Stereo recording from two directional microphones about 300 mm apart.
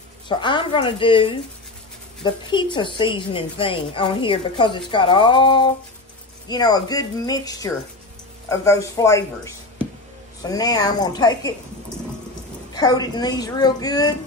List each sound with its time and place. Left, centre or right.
0.3 s a woman's voice: centre
12.7 s a woman's voice: centre